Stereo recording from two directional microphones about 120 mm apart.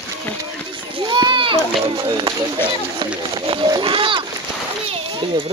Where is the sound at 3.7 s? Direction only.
45° right (ahead or behind).